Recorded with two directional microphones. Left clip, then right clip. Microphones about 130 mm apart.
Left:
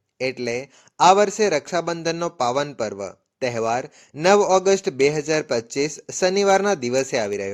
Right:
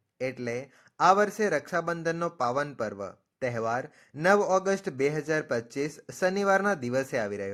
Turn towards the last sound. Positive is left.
turn(degrees=25)  # may be behind; listen again after turning